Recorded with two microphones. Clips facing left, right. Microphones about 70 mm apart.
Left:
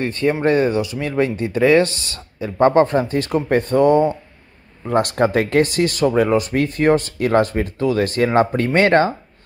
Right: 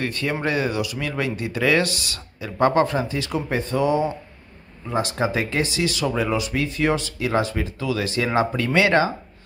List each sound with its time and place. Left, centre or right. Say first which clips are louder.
0.0 s speech: left 7 dB; left